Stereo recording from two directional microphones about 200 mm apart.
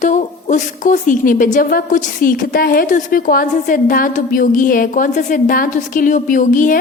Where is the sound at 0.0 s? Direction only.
35° left (ahead or behind).